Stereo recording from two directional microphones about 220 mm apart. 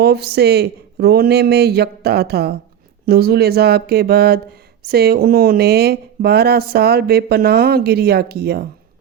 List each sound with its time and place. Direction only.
0.0 s speech: 50° right (ahead or behind)